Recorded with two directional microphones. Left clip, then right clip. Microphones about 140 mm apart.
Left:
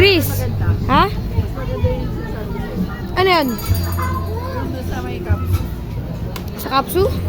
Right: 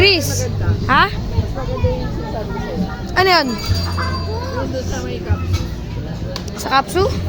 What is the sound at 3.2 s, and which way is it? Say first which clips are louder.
Speech: right 1 dB; 10° left (ahead or behind).